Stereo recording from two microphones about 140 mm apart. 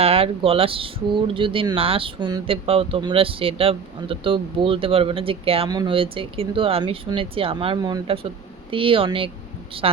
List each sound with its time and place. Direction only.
0.0 s speech: 45° right (ahead or behind)
5.6 s a woman's voice: 30° right (ahead or behind)